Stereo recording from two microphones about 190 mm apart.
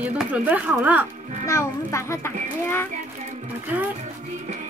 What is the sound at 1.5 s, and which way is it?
Speech, 15° left (ahead or behind).